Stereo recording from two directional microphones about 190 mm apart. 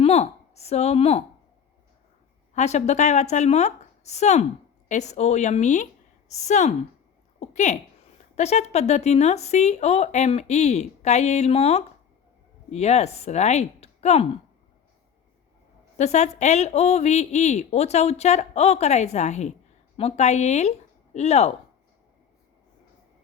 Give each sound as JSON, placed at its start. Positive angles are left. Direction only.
{"t": 0.0, "sound": "speech", "side_deg": 35}
{"t": 2.6, "sound": "a woman's voice", "side_deg": 35}
{"t": 16.0, "sound": "speech", "side_deg": 35}